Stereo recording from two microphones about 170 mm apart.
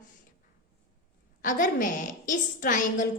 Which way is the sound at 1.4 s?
50° left (ahead or behind).